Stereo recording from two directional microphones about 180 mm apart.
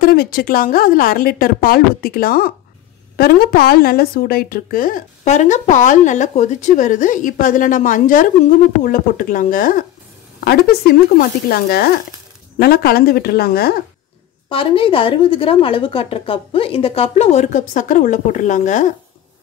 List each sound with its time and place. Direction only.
0.0 s a woman's voice: 55° left (ahead or behind)
14.5 s a woman's voice: 30° left (ahead or behind)